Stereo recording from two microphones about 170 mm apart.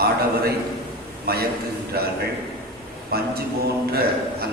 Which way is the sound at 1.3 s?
65° right (ahead or behind).